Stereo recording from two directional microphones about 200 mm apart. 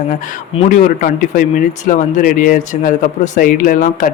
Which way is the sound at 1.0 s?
40° left (ahead or behind).